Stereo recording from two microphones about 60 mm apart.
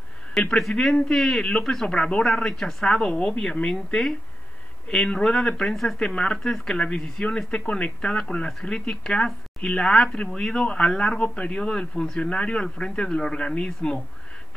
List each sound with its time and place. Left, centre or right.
0.3 s a sound: centre
0.6 s speech: centre
7.2 s speech: centre